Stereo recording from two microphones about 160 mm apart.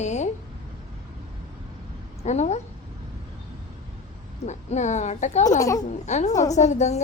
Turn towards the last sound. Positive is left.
turn(degrees=45)  # may be behind; listen again after turning